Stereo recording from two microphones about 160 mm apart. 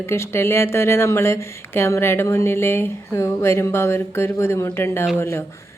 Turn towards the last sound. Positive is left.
turn(degrees=15)  # may be behind; listen again after turning